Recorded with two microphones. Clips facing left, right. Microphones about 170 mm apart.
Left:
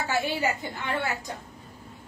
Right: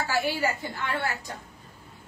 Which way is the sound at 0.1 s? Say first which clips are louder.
Left 1 dB; 20° left (ahead or behind).